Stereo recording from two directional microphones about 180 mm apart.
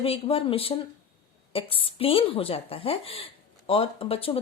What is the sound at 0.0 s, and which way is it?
A woman's voice, 30° left (ahead or behind).